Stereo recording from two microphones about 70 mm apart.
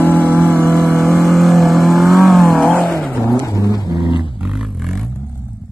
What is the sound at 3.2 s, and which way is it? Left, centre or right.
Vehicle, left.